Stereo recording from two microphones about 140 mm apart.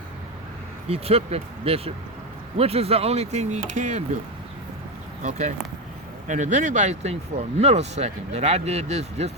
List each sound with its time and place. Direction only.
0.9 s speech: 45° right (ahead or behind); by 4.0 s 60° right (ahead or behind)
5.2 s speech: 55° right (ahead or behind)